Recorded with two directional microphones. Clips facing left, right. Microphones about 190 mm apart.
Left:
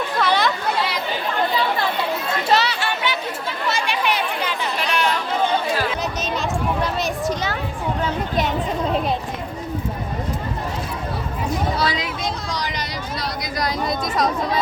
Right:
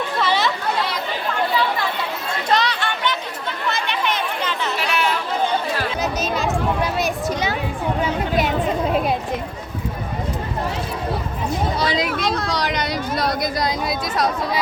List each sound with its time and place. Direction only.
0.2 s chatter: centre (ahead or behind)
2.5 s chatter: 5° left (ahead or behind)
4.8 s chatter: 5° right (ahead or behind)
6.0 s a sound: 5° right (ahead or behind)
12.0 s a sound: 65° right (ahead or behind)
13.8 s speech: 10° right (ahead or behind)